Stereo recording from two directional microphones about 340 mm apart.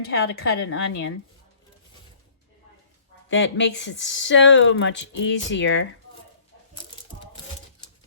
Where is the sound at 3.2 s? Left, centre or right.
Left.